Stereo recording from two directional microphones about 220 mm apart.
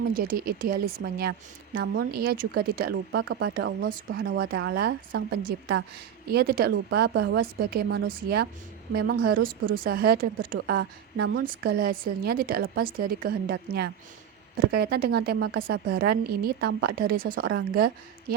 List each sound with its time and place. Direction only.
0.1 s a woman's voice: 40° right (ahead or behind)